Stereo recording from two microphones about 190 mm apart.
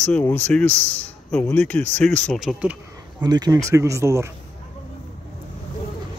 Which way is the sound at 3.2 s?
20° right (ahead or behind).